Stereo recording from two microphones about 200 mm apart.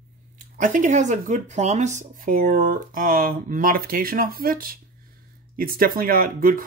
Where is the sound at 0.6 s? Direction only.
40° right (ahead or behind).